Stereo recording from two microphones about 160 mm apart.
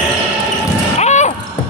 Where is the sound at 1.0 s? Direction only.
45° left (ahead or behind).